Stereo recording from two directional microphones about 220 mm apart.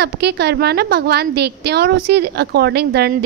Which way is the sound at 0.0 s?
50° right (ahead or behind).